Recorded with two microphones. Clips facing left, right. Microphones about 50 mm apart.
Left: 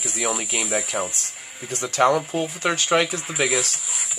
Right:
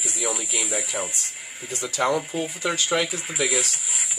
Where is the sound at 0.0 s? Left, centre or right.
Left.